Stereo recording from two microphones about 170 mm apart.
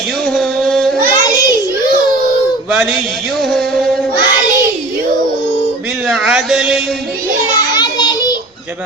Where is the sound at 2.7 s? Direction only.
5° right (ahead or behind).